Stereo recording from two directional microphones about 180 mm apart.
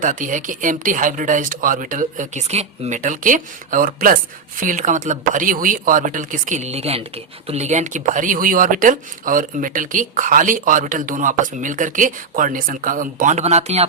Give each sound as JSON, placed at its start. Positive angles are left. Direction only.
{"t": 0.0, "sound": "speech", "side_deg": -45}